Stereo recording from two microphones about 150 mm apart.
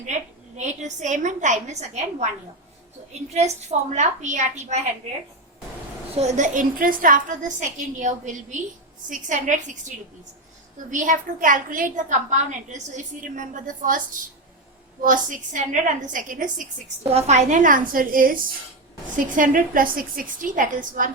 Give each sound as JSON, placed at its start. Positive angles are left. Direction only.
{"t": 0.0, "sound": "a woman's voice", "side_deg": -50}
{"t": 6.1, "sound": "a woman's voice", "side_deg": -55}
{"t": 10.9, "sound": "a woman's voice", "side_deg": -60}
{"t": 15.0, "sound": "a woman's voice", "side_deg": -60}
{"t": 17.0, "sound": "a woman's voice", "side_deg": -45}